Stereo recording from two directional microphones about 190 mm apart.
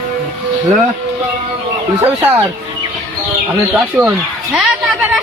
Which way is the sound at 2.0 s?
10° right (ahead or behind).